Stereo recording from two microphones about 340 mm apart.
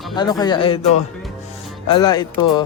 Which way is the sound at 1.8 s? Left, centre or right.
Centre.